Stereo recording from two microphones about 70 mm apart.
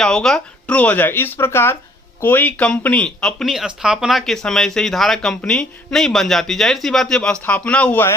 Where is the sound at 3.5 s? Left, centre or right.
Centre.